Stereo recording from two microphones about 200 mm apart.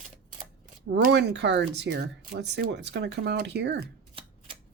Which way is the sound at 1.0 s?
55° right (ahead or behind).